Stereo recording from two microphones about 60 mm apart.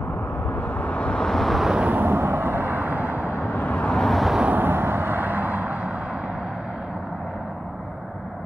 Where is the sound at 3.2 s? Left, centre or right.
Left.